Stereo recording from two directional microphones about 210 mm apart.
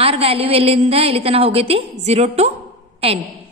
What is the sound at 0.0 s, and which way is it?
A woman's voice, 30° right (ahead or behind).